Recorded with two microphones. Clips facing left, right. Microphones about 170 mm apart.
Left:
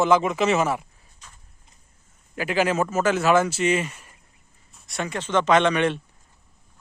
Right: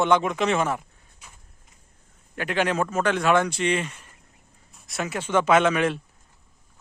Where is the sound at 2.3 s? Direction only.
5° left (ahead or behind).